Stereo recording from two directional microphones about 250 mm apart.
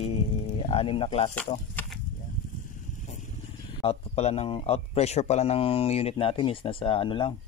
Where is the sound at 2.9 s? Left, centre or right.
Left.